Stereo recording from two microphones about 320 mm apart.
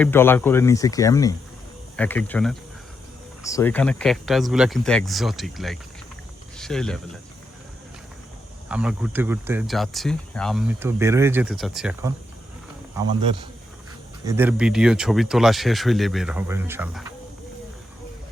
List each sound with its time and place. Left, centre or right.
0.0 s speech: centre
8.7 s speech: centre
14.3 s speech: centre